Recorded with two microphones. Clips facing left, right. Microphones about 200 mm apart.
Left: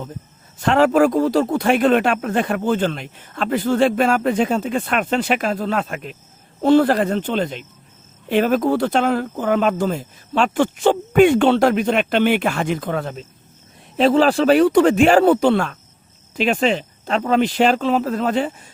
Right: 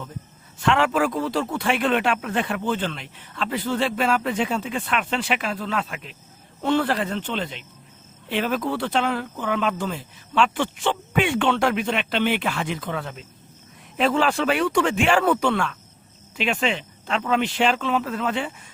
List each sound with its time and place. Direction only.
0.6 s speech: 40° left (ahead or behind)